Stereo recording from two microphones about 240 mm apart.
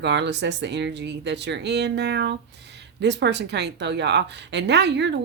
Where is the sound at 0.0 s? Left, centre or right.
Right.